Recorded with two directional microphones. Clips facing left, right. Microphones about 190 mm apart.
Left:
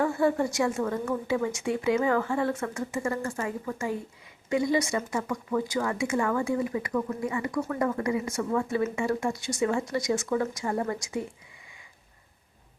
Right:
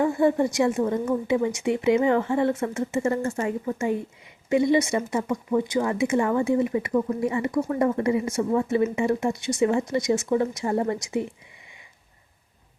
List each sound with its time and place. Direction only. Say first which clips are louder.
0.0 s speech: right 4 dB; 20° right (ahead or behind)